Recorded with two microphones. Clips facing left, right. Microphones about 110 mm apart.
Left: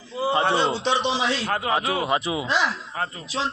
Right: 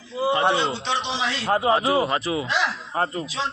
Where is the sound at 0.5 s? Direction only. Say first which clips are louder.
Left 2 dB; 40° left (ahead or behind).